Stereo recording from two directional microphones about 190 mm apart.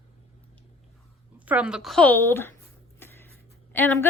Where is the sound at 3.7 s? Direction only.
10° left (ahead or behind).